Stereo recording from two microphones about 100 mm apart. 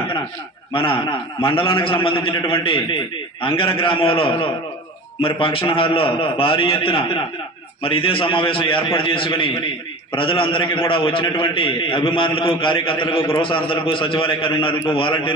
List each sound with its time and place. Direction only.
1.4 s a man's voice: 65° left (ahead or behind)